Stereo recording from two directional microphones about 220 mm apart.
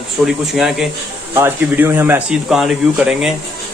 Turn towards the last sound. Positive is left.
turn(degrees=0)  # may be behind; listen again after turning